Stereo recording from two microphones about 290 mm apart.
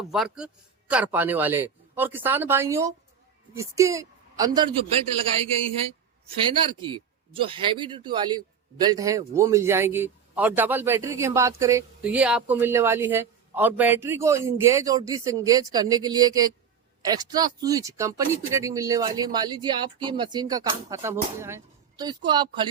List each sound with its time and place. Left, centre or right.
0.1 s a man's voice: centre
6.7 s a man's voice: centre